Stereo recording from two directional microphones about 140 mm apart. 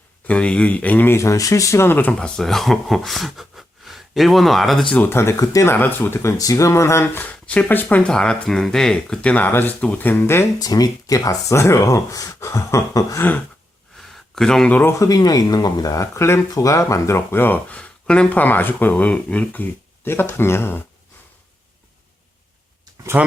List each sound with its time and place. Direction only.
0.3 s speech: 10° left (ahead or behind)
4.9 s speech: 15° left (ahead or behind)
14.3 s speech: 5° left (ahead or behind)
23.1 s speech: 15° right (ahead or behind)